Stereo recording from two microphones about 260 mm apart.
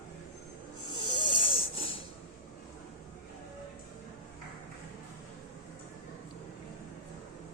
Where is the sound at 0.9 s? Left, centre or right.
Centre.